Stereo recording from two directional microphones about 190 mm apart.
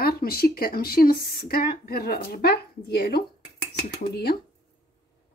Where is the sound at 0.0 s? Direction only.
55° left (ahead or behind).